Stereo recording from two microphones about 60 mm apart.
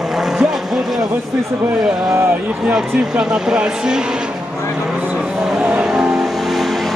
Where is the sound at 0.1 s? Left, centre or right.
Centre.